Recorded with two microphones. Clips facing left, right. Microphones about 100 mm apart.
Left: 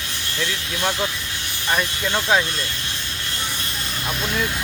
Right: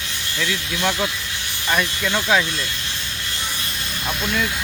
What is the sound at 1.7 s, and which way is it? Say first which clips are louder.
Speech: right 1 dB; 20° left (ahead or behind).